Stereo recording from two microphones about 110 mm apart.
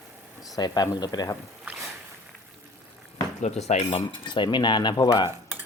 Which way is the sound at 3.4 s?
90° left.